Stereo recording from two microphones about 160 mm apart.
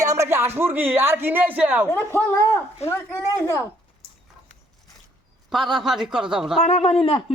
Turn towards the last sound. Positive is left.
turn(degrees=40)  # may be behind; listen again after turning